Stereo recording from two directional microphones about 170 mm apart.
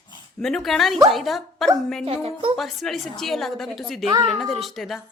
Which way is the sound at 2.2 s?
35° right (ahead or behind).